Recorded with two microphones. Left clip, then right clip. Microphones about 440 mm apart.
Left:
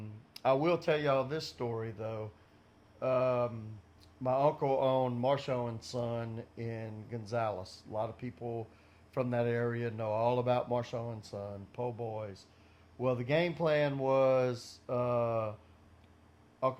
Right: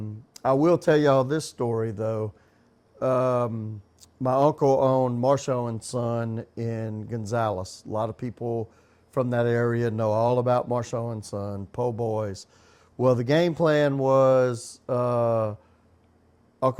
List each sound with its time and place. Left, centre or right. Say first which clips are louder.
0.4 s speech: right 8 dB; right
13.0 s speech: right 10 dB; right